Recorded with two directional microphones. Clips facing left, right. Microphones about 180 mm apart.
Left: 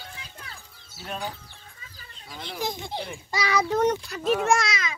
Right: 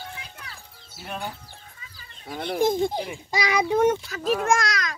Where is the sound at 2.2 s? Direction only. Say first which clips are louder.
Right 9 dB; 55° right (ahead or behind).